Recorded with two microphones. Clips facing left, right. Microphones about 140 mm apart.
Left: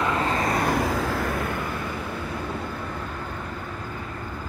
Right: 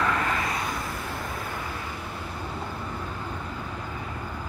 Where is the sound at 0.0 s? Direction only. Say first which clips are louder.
Left 3 dB; 25° left (ahead or behind).